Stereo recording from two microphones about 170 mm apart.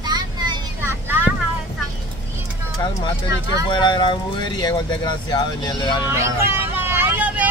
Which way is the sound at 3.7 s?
25° left (ahead or behind).